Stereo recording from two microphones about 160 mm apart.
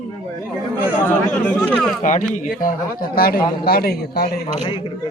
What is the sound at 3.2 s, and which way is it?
A man's voice, 70° left (ahead or behind).